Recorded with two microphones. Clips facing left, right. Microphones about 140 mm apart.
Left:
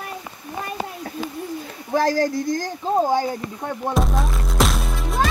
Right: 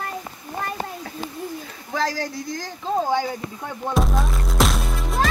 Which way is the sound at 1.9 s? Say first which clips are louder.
Left 6 dB; 45° left (ahead or behind).